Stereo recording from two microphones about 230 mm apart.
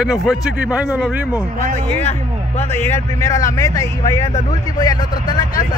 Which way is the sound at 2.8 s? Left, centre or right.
Centre.